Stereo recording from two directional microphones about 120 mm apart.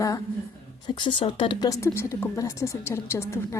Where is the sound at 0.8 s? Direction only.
40° left (ahead or behind).